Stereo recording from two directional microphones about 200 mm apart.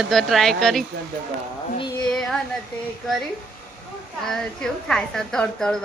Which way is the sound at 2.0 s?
5° left (ahead or behind).